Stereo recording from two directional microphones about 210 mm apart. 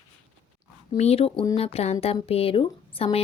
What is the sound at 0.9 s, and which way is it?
A woman's voice, 30° left (ahead or behind).